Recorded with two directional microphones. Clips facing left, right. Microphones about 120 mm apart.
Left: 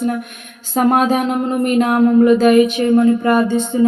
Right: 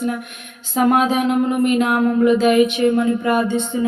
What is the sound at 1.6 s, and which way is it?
Music, 40° left (ahead or behind).